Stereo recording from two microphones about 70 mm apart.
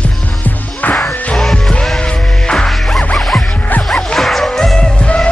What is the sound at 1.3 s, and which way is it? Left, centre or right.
Music, centre.